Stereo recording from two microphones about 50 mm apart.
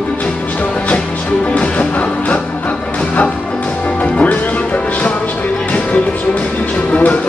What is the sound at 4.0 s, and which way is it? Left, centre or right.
Music, left.